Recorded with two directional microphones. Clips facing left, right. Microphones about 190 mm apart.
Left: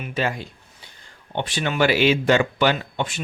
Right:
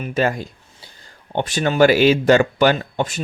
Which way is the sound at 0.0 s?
45° right (ahead or behind).